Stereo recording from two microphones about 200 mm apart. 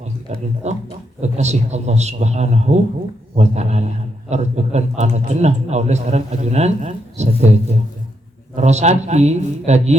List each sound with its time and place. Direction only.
0.0 s a man's voice: 35° right (ahead or behind)